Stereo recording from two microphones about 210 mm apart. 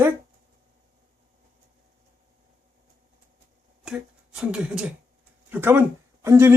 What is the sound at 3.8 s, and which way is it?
Speech, 5° right (ahead or behind).